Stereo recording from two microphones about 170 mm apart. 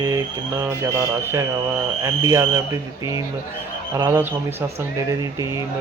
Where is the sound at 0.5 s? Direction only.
15° right (ahead or behind).